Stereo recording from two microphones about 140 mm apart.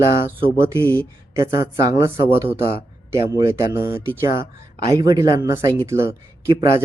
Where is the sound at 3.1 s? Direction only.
20° right (ahead or behind).